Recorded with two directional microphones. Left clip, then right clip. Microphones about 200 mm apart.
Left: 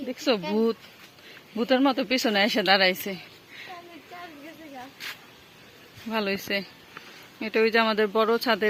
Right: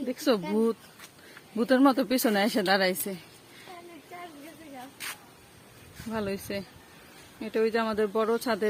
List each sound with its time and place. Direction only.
0.1 s speech: 25° right (ahead or behind)
0.5 s speech: 10° right (ahead or behind)
1.5 s speech: 20° right (ahead or behind)
6.1 s speech: centre (ahead or behind)